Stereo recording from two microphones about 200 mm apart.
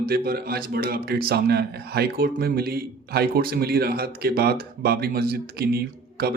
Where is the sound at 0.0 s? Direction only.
50° right (ahead or behind).